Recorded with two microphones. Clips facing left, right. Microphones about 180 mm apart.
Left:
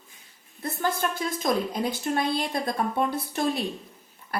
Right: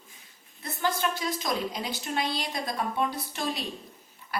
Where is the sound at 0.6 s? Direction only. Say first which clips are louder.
Left 2 dB; 55° left (ahead or behind).